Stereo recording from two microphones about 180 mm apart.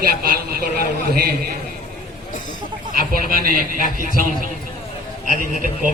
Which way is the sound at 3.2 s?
55° right (ahead or behind).